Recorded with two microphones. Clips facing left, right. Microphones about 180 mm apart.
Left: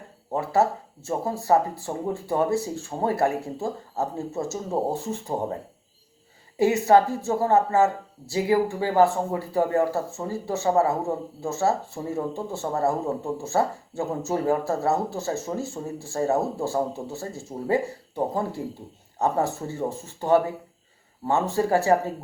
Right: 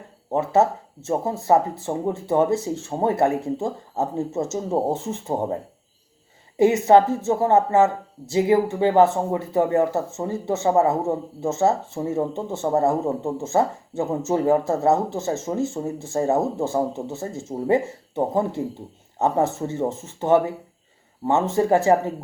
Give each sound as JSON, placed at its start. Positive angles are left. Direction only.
{"t": 0.3, "sound": "speech", "side_deg": -20}
{"t": 6.6, "sound": "speech", "side_deg": -20}